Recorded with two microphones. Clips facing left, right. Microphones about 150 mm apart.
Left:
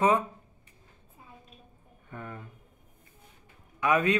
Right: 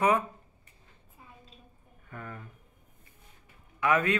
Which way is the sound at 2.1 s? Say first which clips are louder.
Left 2 dB; 20° left (ahead or behind).